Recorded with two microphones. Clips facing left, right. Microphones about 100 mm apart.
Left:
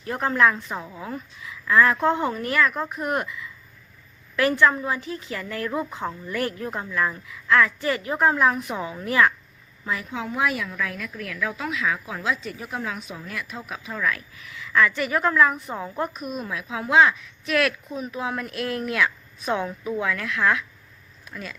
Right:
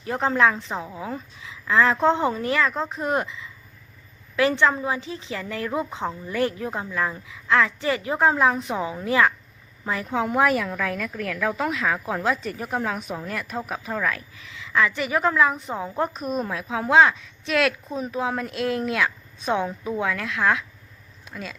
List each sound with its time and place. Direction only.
0.0 s a woman's voice: 20° right (ahead or behind)
9.8 s a woman's voice: 40° right (ahead or behind)
14.1 s a woman's voice: 30° right (ahead or behind)
16.0 s a woman's voice: 35° right (ahead or behind)
21.2 s a sound: 25° right (ahead or behind)